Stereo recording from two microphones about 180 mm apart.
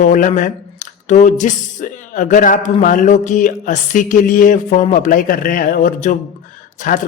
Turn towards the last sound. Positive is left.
turn(degrees=45)  # may be behind; listen again after turning